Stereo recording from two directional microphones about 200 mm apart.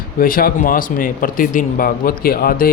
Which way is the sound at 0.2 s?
45° left (ahead or behind).